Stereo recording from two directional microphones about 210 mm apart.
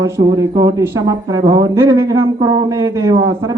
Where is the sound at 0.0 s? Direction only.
15° right (ahead or behind).